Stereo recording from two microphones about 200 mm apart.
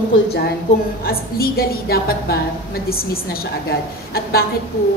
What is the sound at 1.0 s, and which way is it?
A woman's voice, 50° left (ahead or behind).